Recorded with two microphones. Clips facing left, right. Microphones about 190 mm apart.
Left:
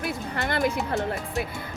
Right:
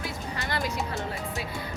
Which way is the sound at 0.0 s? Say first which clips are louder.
Left 5 dB; 55° left (ahead or behind).